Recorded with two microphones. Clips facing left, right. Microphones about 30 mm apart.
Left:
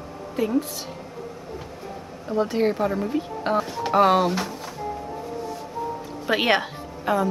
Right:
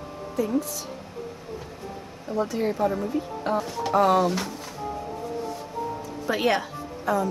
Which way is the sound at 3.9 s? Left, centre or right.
Left.